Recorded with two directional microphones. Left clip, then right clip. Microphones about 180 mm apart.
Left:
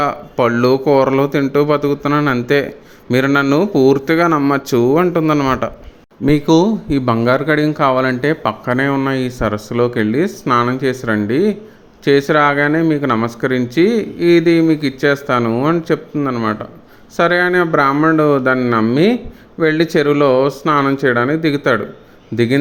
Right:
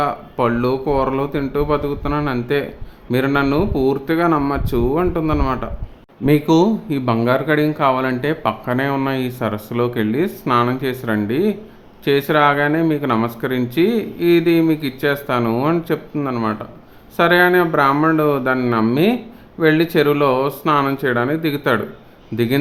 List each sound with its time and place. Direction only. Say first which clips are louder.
0.0 s a man's voice: left 3 dB; 20° left (ahead or behind)